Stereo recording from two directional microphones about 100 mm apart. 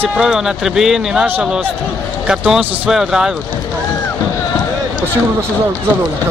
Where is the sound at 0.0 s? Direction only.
5° right (ahead or behind).